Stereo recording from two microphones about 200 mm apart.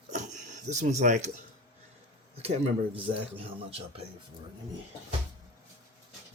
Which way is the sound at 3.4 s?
30° right (ahead or behind).